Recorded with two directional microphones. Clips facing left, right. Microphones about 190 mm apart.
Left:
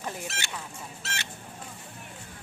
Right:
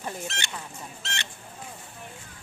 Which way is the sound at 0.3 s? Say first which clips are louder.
Right 1 dB; 5° left (ahead or behind).